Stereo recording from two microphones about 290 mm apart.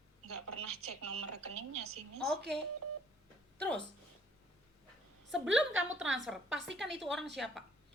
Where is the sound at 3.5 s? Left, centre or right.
Centre.